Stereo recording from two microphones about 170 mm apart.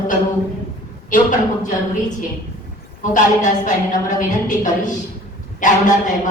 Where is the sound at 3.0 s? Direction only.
50° left (ahead or behind).